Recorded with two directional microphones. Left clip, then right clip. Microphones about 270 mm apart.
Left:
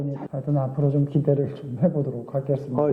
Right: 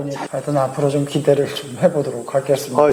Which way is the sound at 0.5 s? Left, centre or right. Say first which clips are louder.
Right 8 dB; centre.